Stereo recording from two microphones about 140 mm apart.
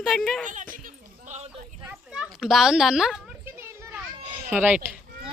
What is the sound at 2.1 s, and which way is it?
Speech, centre (ahead or behind).